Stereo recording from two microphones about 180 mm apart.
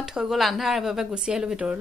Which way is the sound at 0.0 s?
5° right (ahead or behind).